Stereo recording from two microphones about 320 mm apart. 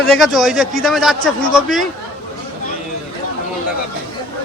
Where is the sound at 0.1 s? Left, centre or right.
Centre.